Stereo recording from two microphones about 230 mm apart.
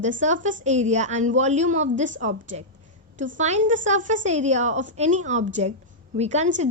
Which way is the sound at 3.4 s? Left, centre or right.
Right.